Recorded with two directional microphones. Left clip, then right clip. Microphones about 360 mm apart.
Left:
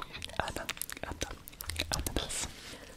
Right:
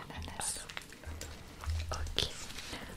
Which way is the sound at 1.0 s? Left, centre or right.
Left.